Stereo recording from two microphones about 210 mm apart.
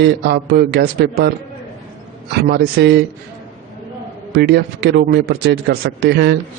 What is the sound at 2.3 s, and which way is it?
Speech, 50° right (ahead or behind).